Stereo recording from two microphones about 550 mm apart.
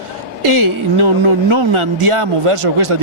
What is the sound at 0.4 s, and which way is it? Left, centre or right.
Speech, right.